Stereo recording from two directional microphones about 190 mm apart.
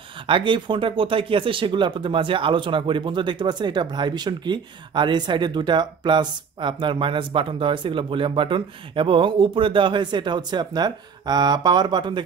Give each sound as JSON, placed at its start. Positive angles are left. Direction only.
{"t": 0.3, "sound": "speech", "side_deg": -25}